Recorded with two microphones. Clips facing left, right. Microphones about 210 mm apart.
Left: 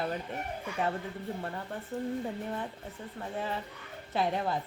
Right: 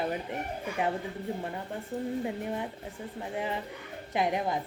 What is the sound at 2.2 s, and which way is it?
A woman's voice, 15° right (ahead or behind).